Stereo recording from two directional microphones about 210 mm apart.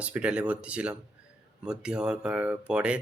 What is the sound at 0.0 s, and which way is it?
Speech, 5° right (ahead or behind).